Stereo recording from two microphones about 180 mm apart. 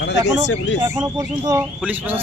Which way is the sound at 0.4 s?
85° left.